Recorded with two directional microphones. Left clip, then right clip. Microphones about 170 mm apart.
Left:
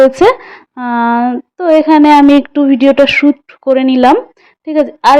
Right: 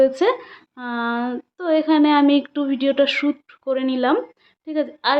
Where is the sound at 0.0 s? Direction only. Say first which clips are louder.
Left 10 dB; 40° left (ahead or behind).